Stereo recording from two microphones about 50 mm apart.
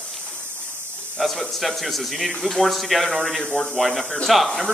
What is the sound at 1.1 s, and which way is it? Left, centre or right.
Speech, centre.